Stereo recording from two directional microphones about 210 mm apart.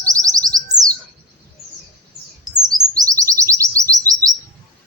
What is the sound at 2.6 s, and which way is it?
Chirp, 20° right (ahead or behind).